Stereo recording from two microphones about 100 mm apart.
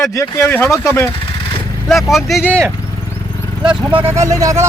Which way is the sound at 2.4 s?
20° right (ahead or behind).